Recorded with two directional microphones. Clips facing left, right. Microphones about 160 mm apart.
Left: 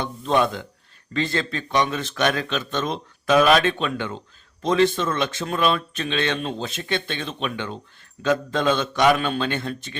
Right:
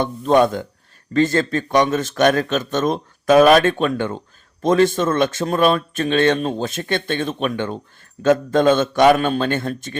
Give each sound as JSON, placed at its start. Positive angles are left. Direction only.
{"t": 0.0, "sound": "speech", "side_deg": -50}